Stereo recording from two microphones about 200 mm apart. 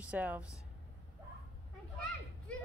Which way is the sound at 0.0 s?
5° right (ahead or behind).